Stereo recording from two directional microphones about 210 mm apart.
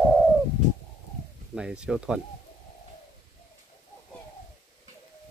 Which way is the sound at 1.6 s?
5° right (ahead or behind).